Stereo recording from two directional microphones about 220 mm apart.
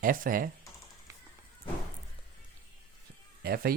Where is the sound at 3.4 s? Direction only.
45° right (ahead or behind).